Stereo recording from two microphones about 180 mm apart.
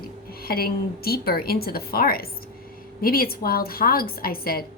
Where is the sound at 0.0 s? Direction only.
55° left (ahead or behind).